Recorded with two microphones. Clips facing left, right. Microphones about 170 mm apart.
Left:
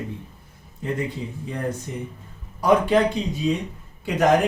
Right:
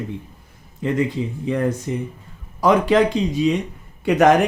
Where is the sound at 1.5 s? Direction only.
90° right.